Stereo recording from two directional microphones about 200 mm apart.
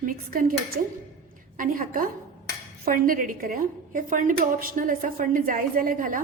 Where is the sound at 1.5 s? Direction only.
45° right (ahead or behind).